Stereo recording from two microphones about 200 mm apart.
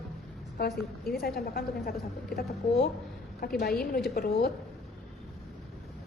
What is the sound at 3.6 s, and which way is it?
Speech, 50° left (ahead or behind).